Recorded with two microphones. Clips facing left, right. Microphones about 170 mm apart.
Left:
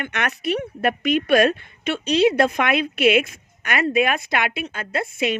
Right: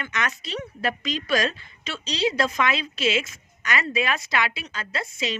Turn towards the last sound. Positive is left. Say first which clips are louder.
# left 6 dB
turn(degrees=55)  # may be behind; listen again after turning